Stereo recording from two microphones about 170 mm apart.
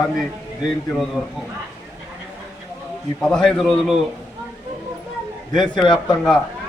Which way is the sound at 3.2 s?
Centre (ahead or behind).